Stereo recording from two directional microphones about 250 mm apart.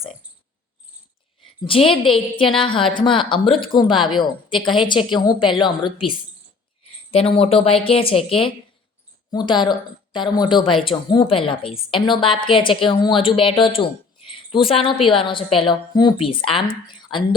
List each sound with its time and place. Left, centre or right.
1.9 s a woman's voice: left